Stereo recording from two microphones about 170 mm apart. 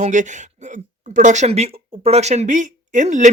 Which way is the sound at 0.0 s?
45° right (ahead or behind).